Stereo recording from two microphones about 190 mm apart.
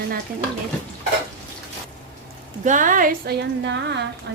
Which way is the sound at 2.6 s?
45° right (ahead or behind).